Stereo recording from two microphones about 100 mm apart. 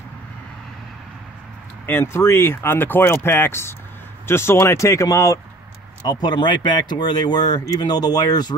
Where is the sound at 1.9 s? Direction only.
25° left (ahead or behind).